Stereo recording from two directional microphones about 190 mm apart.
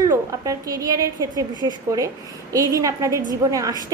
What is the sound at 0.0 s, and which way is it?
A woman's voice, 20° right (ahead or behind).